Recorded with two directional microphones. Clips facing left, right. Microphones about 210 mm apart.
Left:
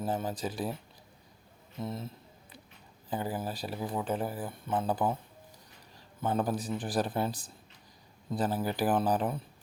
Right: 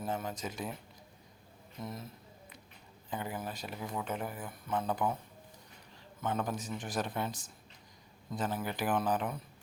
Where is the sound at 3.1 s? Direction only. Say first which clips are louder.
Left 5 dB; 35° left (ahead or behind).